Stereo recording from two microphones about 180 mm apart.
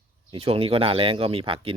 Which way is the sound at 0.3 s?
30° right (ahead or behind).